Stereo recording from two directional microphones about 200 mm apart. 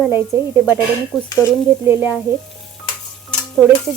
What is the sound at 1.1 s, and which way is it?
Dishes, centre (ahead or behind).